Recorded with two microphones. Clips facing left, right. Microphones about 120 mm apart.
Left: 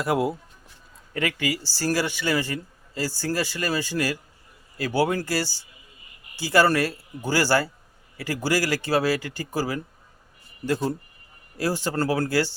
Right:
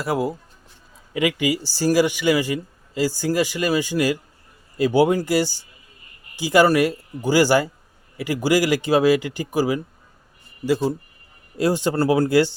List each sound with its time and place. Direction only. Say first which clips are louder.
0.0 s speech: right 1 dB; centre (ahead or behind)
1.1 s speech: right 6 dB; 15° right (ahead or behind)
11.5 s speech: right 5 dB; 20° right (ahead or behind)